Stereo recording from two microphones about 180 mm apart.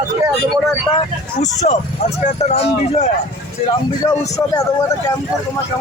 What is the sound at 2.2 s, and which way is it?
Speech, 35° left (ahead or behind).